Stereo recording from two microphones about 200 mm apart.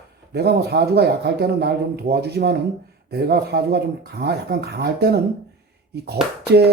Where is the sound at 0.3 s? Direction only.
55° right (ahead or behind).